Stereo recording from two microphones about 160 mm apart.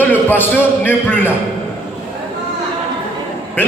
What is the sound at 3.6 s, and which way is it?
Speech, 10° left (ahead or behind).